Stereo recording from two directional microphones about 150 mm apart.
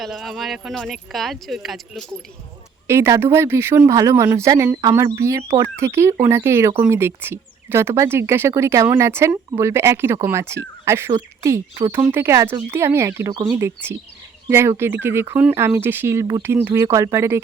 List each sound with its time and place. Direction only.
0.0 s speech: centre (ahead or behind)
2.8 s speech: 20° right (ahead or behind)